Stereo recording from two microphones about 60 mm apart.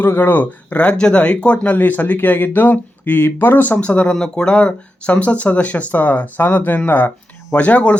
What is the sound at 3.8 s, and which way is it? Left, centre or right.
Speech, centre.